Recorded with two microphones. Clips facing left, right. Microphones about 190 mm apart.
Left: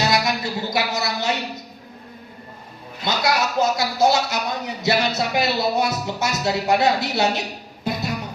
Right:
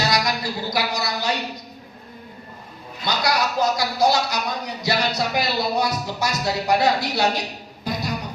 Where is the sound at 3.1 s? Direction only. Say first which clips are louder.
Left 1 dB; 25° left (ahead or behind).